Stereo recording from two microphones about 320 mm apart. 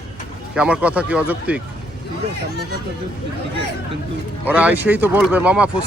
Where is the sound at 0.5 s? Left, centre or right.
Centre.